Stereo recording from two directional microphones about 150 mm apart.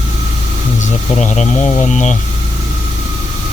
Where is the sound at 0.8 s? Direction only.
50° left (ahead or behind).